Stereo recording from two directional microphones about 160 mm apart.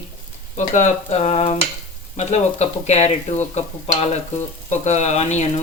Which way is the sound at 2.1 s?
45° left (ahead or behind).